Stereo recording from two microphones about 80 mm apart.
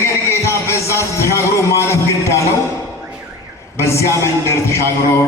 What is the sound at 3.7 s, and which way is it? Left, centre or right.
A man's voice, left.